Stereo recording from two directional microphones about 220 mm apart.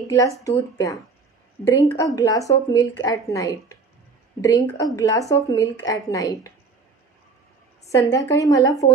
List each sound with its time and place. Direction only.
0.1 s speech: 15° left (ahead or behind)
7.8 s speech: 15° left (ahead or behind)